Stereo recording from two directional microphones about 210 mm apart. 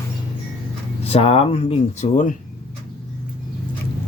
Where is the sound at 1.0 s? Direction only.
30° left (ahead or behind).